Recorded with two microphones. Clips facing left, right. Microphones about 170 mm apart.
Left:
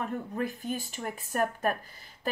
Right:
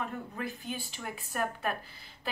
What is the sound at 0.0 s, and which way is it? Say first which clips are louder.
A woman's voice: left 5 dB; 45° left (ahead or behind).